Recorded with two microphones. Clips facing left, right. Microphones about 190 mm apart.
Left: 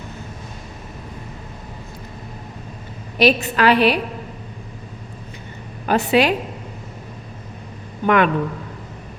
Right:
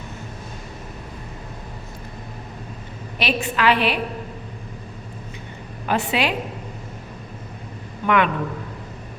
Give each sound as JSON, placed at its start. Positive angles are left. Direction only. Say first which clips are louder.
{"t": 3.2, "sound": "a woman's voice", "louder": "left 7 dB", "side_deg": 40}
{"t": 5.8, "sound": "a woman's voice", "louder": "left 6 dB", "side_deg": 40}
{"t": 8.0, "sound": "a woman's voice", "louder": "left 3 dB", "side_deg": 40}